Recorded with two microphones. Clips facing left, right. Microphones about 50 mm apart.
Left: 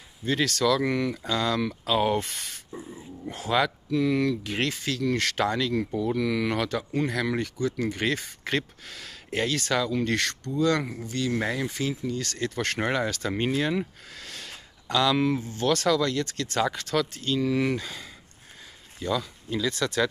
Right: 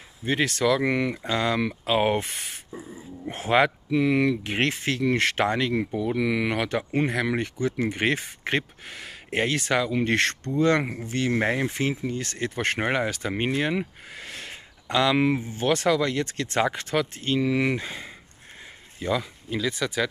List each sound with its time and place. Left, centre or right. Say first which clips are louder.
0.2 s speech: right 1 dB; right
2.7 s speech: even; centre
3.3 s speech: right 4 dB; right
6.8 s speech: right 2 dB; right; by 20.1 s centre